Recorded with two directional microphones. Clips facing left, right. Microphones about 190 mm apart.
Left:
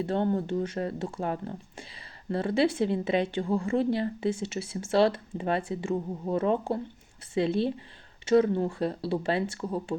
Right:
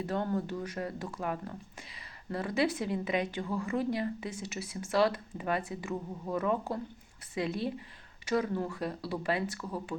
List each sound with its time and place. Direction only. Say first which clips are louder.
0.0 s a woman's voice: left 5 dB; 30° left (ahead or behind)